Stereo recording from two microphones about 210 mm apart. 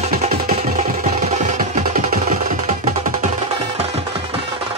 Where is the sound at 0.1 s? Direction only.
40° right (ahead or behind).